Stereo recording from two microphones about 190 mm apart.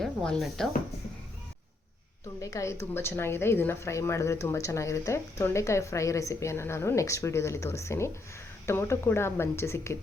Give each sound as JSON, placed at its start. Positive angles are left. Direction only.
{"t": 0.0, "sound": "speech", "side_deg": 5}
{"t": 2.4, "sound": "speech", "side_deg": 15}